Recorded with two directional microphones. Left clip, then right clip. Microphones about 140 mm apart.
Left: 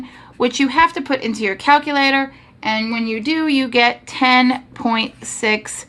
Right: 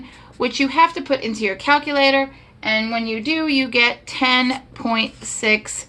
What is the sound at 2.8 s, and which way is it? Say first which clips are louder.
Speech: even; 65° left (ahead or behind).